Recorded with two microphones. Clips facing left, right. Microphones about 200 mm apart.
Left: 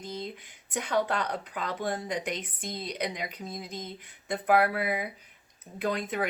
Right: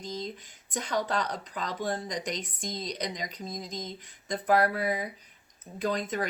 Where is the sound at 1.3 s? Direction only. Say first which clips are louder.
Left 1 dB; 10° left (ahead or behind).